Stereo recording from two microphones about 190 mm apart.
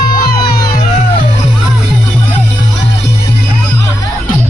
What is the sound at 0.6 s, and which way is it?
Music, 20° left (ahead or behind).